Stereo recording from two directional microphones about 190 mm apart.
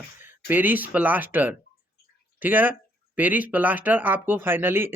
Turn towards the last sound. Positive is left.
turn(degrees=-10)  # may be behind; listen again after turning